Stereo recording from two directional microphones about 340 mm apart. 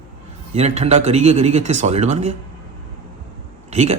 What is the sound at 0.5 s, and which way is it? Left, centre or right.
Speech, centre.